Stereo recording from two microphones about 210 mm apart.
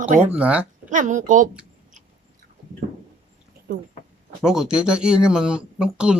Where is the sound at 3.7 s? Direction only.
45° right (ahead or behind).